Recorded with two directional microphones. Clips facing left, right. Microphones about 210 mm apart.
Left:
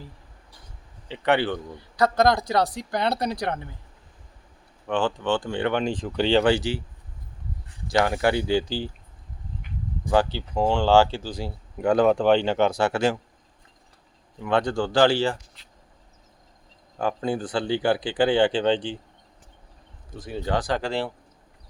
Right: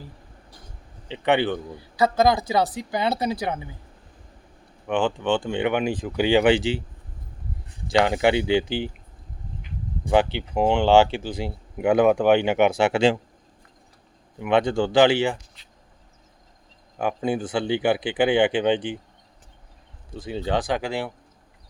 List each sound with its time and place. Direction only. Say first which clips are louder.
1.0 s speech: right 1 dB; 20° right (ahead or behind)
2.0 s speech: right 1 dB; 5° right (ahead or behind)
4.9 s speech: right 2 dB; 10° right (ahead or behind)
6.5 s speech: right 3 dB; 25° right (ahead or behind)
7.9 s speech: right 2 dB; 20° right (ahead or behind)
10.0 s speech: right 2 dB; 20° right (ahead or behind)
11.8 s speech: right 1 dB; 10° right (ahead or behind); by 13.1 s 25° right (ahead or behind)
14.4 s speech: right 3 dB; 25° right (ahead or behind)
17.0 s speech: right 1 dB; 15° right (ahead or behind)
20.3 s speech: right 1 dB; 20° right (ahead or behind)
20.8 s speech: left 1 dB; 10° right (ahead or behind)